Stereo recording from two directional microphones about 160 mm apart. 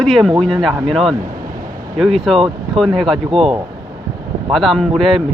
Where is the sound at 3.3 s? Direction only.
35° right (ahead or behind).